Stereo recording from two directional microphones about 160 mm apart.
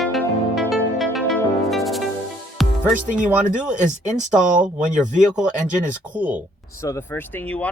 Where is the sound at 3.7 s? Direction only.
50° right (ahead or behind).